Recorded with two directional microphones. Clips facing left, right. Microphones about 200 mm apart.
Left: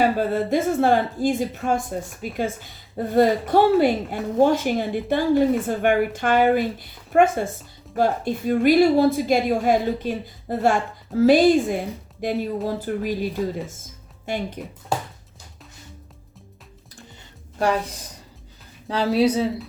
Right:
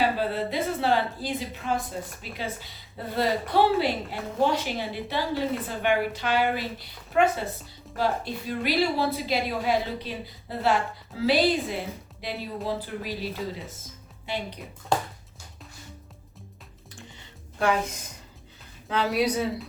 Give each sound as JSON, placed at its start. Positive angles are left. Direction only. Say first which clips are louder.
{"t": 0.0, "sound": "a woman's voice", "louder": "left 5 dB", "side_deg": 45}
{"t": 14.3, "sound": "a woman's voice", "louder": "left 5 dB", "side_deg": 50}
{"t": 14.9, "sound": "a sound", "louder": "even", "side_deg": 5}
{"t": 17.6, "sound": "a woman's voice", "louder": "left 3 dB", "side_deg": 35}